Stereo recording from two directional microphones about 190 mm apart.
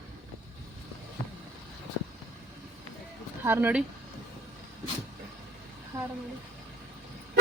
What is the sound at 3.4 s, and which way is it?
Speech, 10° right (ahead or behind).